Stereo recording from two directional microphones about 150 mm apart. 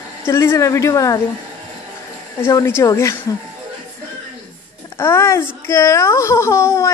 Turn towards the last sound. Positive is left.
turn(degrees=20)  # may be behind; listen again after turning